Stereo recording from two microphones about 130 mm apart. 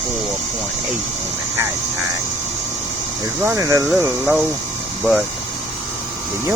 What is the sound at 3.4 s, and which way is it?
Speech, 20° right (ahead or behind).